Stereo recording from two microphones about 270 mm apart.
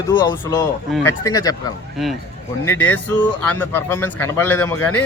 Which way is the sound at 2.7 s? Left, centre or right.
Centre.